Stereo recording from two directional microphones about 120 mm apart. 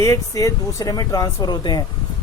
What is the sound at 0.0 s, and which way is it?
Speech, 30° left (ahead or behind).